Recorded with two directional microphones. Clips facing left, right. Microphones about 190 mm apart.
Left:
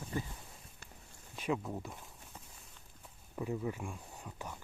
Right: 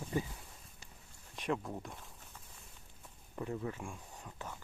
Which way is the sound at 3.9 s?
10° left (ahead or behind).